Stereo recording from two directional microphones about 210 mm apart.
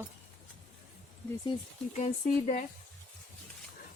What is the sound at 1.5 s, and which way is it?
Speech, 35° left (ahead or behind).